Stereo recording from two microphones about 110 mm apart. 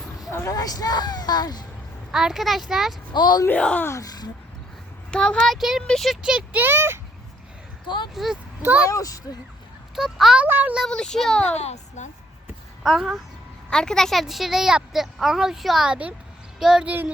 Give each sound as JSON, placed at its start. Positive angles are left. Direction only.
{"t": 0.3, "sound": "speech", "side_deg": 25}
{"t": 2.1, "sound": "a woman's voice", "side_deg": -5}
{"t": 3.1, "sound": "a woman's voice", "side_deg": 40}
{"t": 3.4, "sound": "speech", "side_deg": 10}
{"t": 3.8, "sound": "speech", "side_deg": 30}
{"t": 5.1, "sound": "a woman's voice", "side_deg": 5}
{"t": 8.1, "sound": "a woman's voice", "side_deg": 0}
{"t": 8.9, "sound": "a woman's voice", "side_deg": 30}
{"t": 9.9, "sound": "a woman's voice", "side_deg": -5}
{"t": 10.4, "sound": "speech", "side_deg": -15}
{"t": 10.8, "sound": "a woman's voice", "side_deg": 5}
{"t": 11.4, "sound": "a child's voice", "side_deg": 85}
{"t": 12.8, "sound": "a child's voice", "side_deg": 0}